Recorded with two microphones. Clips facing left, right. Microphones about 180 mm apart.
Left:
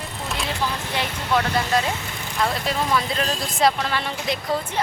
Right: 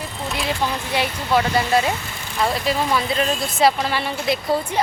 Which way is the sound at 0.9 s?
5° right (ahead or behind).